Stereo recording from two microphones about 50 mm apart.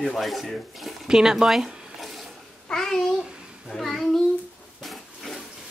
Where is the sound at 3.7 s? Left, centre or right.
Centre.